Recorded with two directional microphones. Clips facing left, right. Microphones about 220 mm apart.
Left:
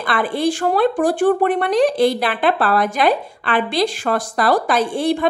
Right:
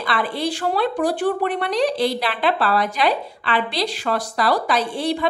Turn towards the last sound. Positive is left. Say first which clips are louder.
# left 4 dB
turn(degrees=50)  # may be behind; listen again after turning